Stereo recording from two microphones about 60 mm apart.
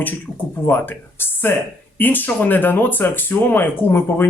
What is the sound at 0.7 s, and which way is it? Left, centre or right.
Speech, left.